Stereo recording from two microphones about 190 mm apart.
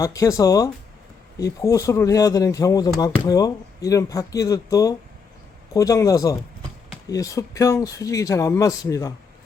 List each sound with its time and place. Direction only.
0.0 s speech: 15° left (ahead or behind)